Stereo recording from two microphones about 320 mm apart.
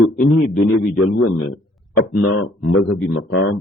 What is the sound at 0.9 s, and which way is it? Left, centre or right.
Speech, left.